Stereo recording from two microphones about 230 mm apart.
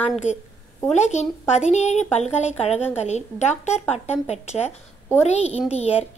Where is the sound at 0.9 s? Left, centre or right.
Left.